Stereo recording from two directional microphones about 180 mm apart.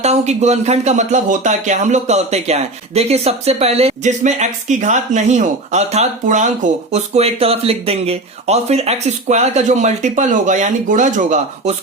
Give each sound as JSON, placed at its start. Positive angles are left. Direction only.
{"t": 0.0, "sound": "speech", "side_deg": -40}